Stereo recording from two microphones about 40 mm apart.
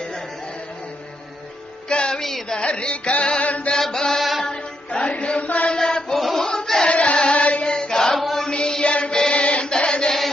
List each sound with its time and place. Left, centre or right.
1.9 s music: left
3.4 s chant: left
3.8 s chant: centre
4.2 s music: centre
4.4 s mantra: left
5.7 s a sound: centre
6.1 s a sound: centre
6.4 s choir: left
7.2 s music: left
7.7 s choir: centre
8.1 s chant: centre
8.4 s music: left
9.3 s chant: left
10.1 s chant: centre